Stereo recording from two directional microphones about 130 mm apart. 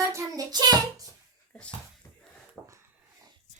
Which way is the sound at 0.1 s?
25° right (ahead or behind).